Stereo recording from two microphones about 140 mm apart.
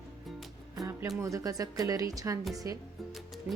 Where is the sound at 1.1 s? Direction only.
25° right (ahead or behind).